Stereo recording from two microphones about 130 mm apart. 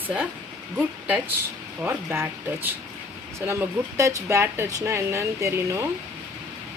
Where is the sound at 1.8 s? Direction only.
20° right (ahead or behind).